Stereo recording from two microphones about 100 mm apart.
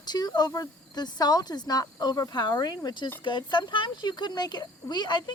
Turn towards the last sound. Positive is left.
turn(degrees=45)  # may be behind; listen again after turning